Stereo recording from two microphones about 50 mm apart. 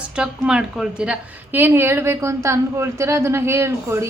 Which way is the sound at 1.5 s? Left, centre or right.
Right.